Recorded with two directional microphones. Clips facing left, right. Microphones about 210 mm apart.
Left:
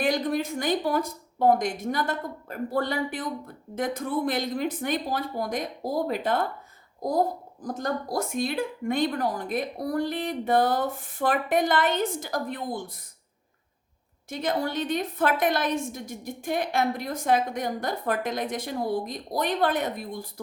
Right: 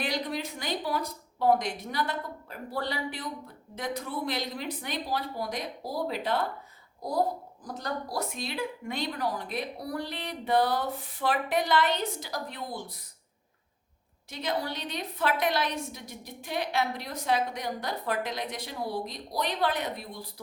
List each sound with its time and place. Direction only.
0.0 s a woman's voice: 50° left (ahead or behind)
14.3 s a woman's voice: 50° left (ahead or behind)